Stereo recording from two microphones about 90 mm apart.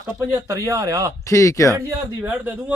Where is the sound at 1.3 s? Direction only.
35° left (ahead or behind).